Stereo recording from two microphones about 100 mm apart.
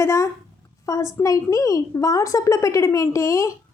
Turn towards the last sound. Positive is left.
turn(degrees=30)  # may be behind; listen again after turning